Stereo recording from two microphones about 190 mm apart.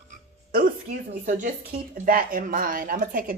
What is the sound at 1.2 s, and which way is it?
A woman's voice, 40° right (ahead or behind).